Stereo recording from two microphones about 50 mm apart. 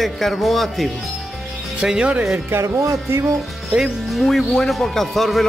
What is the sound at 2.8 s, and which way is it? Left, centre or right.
Speech, right.